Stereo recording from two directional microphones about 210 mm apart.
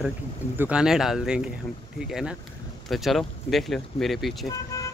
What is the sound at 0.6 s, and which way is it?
Speech, 5° right (ahead or behind).